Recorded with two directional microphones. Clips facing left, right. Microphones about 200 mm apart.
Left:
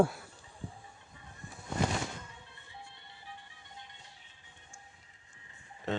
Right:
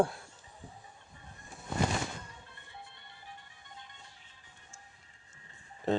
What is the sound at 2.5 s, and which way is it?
Music, 55° right (ahead or behind).